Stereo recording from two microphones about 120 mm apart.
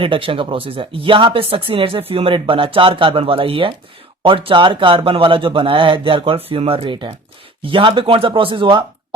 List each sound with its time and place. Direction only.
0.0 s speech: 50° right (ahead or behind)